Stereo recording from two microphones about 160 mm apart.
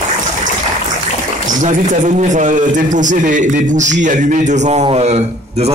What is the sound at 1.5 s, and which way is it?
A man's voice, 50° right (ahead or behind).